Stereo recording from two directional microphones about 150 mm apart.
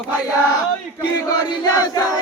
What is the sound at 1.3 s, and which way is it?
Crowd, 25° left (ahead or behind).